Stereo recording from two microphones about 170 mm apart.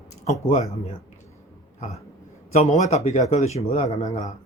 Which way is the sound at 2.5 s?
40° left (ahead or behind).